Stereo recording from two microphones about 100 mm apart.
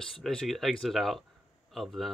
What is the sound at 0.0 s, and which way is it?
Speech, 5° left (ahead or behind).